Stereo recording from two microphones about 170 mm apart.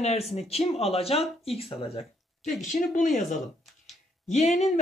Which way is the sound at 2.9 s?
50° left (ahead or behind).